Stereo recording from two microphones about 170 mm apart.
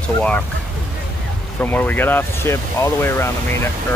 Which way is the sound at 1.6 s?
10° left (ahead or behind).